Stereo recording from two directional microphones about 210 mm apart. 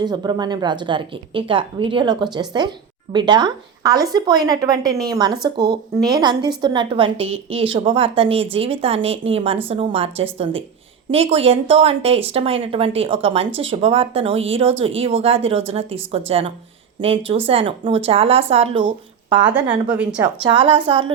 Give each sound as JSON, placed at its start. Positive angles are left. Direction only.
{"t": 0.0, "sound": "a woman's voice", "side_deg": -20}
{"t": 5.4, "sound": "a woman's voice", "side_deg": -50}
{"t": 6.1, "sound": "a woman's voice", "side_deg": -20}
{"t": 19.5, "sound": "a woman's voice", "side_deg": -5}
{"t": 20.4, "sound": "a woman's voice", "side_deg": -25}